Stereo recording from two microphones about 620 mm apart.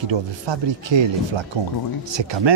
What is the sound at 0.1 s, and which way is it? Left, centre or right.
Speech, right.